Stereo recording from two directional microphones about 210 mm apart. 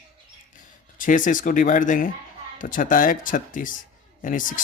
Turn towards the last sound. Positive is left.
turn(degrees=40)  # may be behind; listen again after turning